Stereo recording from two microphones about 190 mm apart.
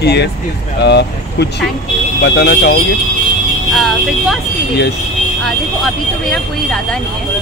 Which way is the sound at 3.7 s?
Centre (ahead or behind).